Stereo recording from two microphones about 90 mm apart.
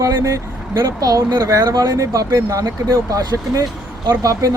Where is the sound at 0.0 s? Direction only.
35° right (ahead or behind).